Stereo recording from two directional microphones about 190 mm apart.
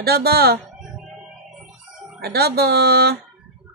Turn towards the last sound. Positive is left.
turn(degrees=-55)  # may be behind; listen again after turning